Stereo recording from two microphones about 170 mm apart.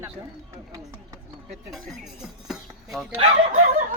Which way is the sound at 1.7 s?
Centre (ahead or behind).